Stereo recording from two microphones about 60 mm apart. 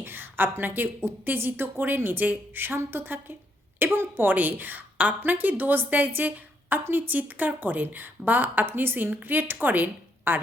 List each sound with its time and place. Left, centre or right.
0.0 s a woman's voice: right